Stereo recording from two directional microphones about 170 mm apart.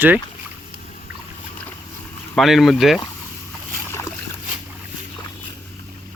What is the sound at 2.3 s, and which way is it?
Speech, centre (ahead or behind).